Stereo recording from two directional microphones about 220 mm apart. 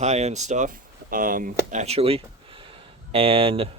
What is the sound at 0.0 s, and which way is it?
Speech, 30° right (ahead or behind).